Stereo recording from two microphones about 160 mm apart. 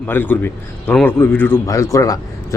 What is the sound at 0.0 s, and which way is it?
A man's voice, 10° left (ahead or behind).